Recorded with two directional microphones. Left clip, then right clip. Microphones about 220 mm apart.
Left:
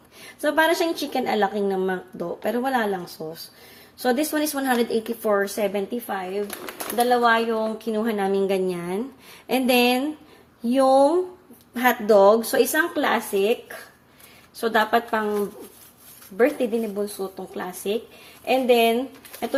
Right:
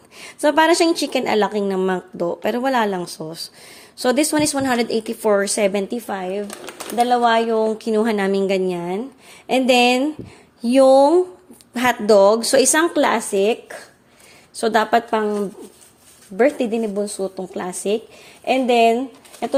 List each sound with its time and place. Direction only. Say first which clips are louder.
0.2 s a woman's voice: right 5 dB; 35° right (ahead or behind)
16.4 s a woman's voice: right 3 dB; 40° right (ahead or behind)